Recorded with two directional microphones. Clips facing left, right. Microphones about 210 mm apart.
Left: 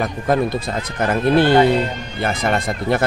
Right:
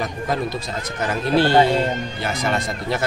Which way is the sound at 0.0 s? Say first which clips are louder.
Left 5 dB; 55° left (ahead or behind).